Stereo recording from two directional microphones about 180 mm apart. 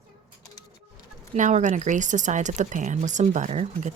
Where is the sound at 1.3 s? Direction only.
45° right (ahead or behind).